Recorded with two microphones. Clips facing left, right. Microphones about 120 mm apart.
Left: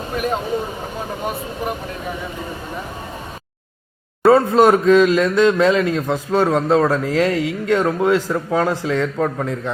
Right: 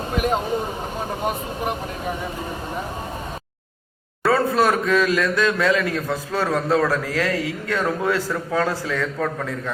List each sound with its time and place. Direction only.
1.2 s speech: 5° right (ahead or behind)
4.2 s speech: 25° left (ahead or behind)